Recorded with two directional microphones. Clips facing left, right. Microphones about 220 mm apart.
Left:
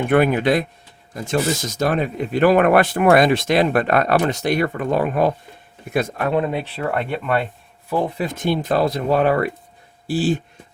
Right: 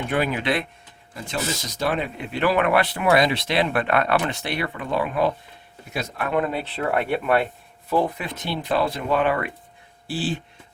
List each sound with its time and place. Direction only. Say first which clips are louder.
0.1 s speech: left 7 dB; 50° left (ahead or behind)
6.3 s speech: left 2 dB; 20° left (ahead or behind)
6.9 s speech: right 1 dB; 5° right (ahead or behind)
8.2 s speech: left 8 dB; 45° left (ahead or behind)